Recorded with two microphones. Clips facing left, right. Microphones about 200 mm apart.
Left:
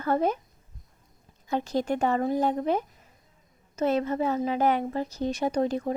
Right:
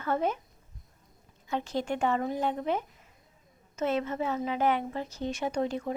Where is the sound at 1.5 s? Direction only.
40° left (ahead or behind).